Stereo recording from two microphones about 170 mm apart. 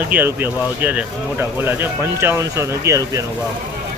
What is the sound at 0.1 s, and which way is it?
Speech, 10° right (ahead or behind).